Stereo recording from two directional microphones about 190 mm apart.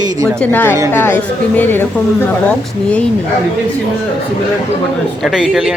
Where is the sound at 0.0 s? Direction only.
20° right (ahead or behind).